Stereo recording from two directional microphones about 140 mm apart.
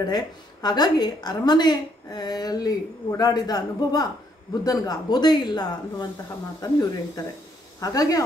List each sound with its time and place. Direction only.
0.1 s speech: 30° left (ahead or behind)